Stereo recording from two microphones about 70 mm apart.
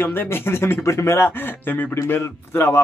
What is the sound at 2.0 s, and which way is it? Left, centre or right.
Speech, left.